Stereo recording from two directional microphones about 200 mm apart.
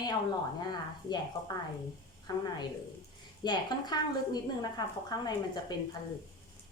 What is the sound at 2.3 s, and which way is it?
Speech, 20° left (ahead or behind).